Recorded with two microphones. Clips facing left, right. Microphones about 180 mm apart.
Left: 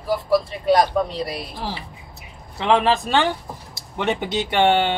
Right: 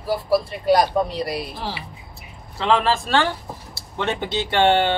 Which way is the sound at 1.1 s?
5° right (ahead or behind).